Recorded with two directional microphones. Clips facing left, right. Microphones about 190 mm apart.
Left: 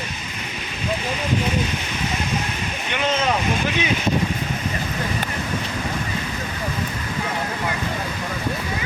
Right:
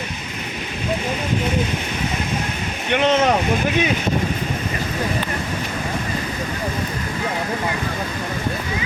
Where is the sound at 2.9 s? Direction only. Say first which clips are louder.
Right 6 dB; 65° right (ahead or behind).